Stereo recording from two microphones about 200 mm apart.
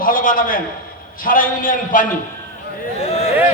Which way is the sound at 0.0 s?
45° left (ahead or behind).